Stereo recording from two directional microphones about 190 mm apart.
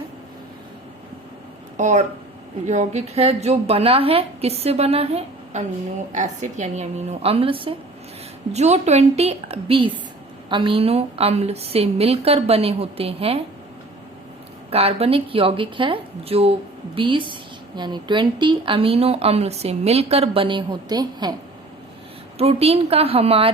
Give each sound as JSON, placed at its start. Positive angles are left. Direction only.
{"t": 1.7, "sound": "a woman's voice", "side_deg": -40}
{"t": 14.7, "sound": "a woman's voice", "side_deg": -30}
{"t": 22.4, "sound": "a woman's voice", "side_deg": -30}